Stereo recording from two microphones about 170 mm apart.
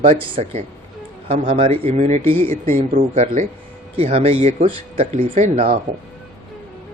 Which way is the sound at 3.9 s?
35° right (ahead or behind).